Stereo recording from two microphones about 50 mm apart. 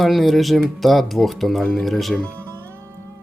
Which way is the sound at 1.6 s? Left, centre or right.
Centre.